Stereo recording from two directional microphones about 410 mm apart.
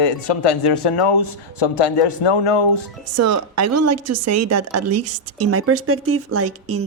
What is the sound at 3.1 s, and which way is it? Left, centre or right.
Speech, right.